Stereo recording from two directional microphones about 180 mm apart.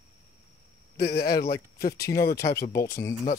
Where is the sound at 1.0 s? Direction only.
60° left (ahead or behind).